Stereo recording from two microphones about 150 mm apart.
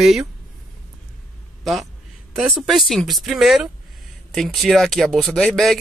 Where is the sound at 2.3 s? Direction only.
Centre (ahead or behind).